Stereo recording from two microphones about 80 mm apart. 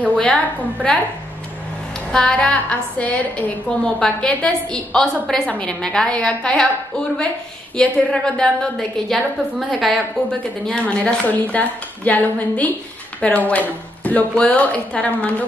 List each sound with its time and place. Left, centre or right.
0.2 s a woman's voice: centre
2.1 s a woman's voice: centre
7.7 s a woman's voice: centre
10.6 s a woman's voice: centre